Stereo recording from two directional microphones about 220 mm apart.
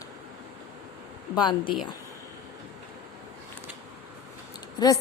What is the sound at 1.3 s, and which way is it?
Speech, 20° left (ahead or behind).